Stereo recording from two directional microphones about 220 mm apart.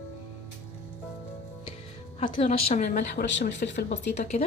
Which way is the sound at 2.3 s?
25° left (ahead or behind).